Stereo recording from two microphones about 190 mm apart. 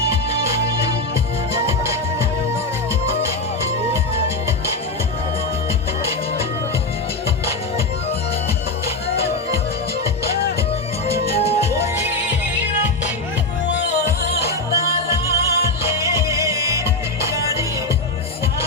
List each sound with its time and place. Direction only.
11.0 s music: 30° left (ahead or behind)
11.7 s music: 10° right (ahead or behind)
14.8 s music: 15° right (ahead or behind)